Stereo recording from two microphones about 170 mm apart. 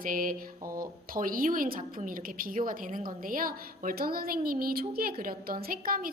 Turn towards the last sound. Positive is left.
turn(degrees=-60)  # may be behind; listen again after turning